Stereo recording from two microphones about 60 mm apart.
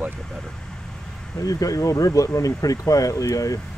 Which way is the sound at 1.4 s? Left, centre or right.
Left.